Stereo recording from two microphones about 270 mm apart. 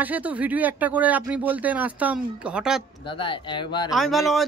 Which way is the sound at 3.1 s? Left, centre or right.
Centre.